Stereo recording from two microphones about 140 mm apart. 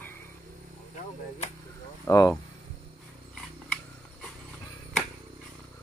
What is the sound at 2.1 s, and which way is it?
Speech, 20° left (ahead or behind).